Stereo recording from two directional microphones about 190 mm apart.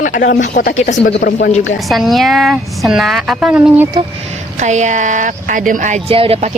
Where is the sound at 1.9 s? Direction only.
Centre (ahead or behind).